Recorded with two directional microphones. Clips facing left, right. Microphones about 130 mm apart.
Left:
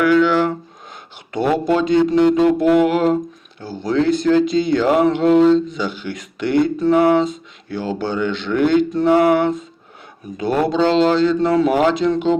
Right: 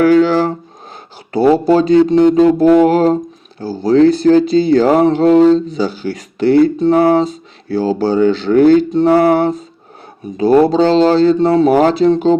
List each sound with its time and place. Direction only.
0.0 s speech: 35° right (ahead or behind)